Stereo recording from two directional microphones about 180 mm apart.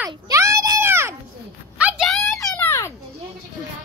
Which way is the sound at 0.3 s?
15° right (ahead or behind).